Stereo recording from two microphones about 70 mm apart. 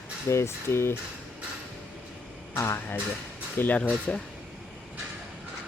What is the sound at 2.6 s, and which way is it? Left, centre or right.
Speech, left.